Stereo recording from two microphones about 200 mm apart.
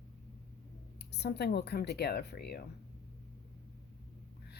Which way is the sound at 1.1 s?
55° left (ahead or behind).